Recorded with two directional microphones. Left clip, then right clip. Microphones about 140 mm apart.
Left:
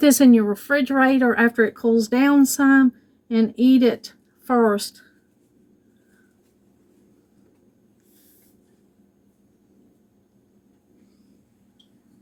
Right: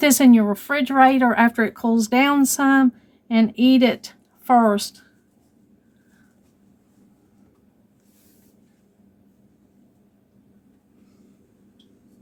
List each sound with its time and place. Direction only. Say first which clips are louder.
0.0 s speech: even; 70° right (ahead or behind); by 5.0 s 90° right